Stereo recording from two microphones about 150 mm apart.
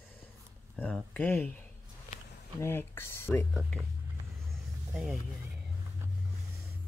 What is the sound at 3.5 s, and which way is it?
Speech, centre (ahead or behind).